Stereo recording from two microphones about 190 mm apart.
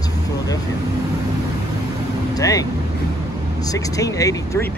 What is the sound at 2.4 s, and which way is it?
Speech, 20° left (ahead or behind).